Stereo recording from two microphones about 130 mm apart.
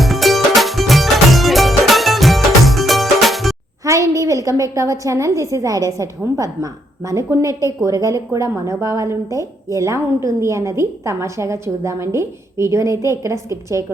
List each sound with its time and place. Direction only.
0.0 s music: centre (ahead or behind)
3.8 s a woman's voice: 25° right (ahead or behind)